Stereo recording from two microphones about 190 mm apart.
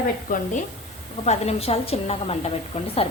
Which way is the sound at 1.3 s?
35° left (ahead or behind).